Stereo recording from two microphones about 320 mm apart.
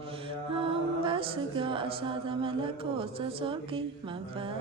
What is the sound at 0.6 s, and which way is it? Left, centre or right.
Music, centre.